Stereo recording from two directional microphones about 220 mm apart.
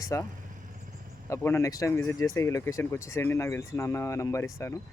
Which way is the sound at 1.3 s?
10° left (ahead or behind).